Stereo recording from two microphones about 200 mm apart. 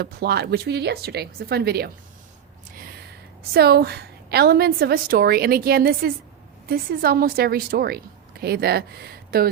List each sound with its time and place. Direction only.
0.0 s a woman's voice: 55° right (ahead or behind)
3.5 s a woman's voice: 55° right (ahead or behind)